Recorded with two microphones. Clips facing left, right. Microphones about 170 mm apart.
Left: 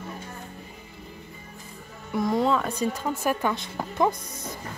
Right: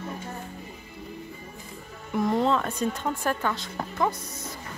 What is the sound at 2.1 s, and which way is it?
Speech, centre (ahead or behind).